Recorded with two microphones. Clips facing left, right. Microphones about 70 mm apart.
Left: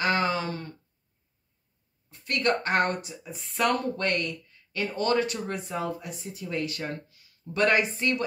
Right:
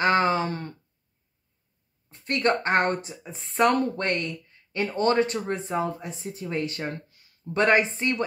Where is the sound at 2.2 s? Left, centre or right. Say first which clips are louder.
Right 2 dB; right.